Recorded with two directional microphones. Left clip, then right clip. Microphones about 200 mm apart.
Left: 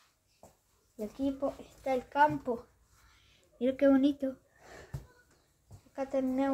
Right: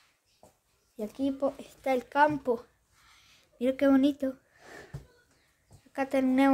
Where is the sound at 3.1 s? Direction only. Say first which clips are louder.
Right 6 dB; 35° right (ahead or behind).